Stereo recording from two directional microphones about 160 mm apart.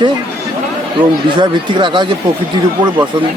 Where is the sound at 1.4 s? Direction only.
30° right (ahead or behind).